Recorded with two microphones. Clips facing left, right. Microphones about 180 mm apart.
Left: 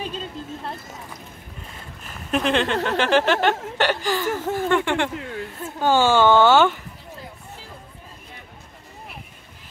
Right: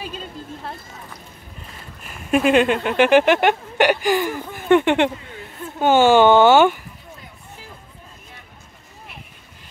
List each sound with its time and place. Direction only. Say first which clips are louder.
2.3 s speech: right 5 dB; 10° right (ahead or behind)